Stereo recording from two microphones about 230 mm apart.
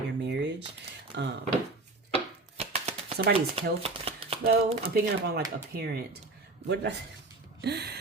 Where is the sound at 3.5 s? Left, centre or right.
Right.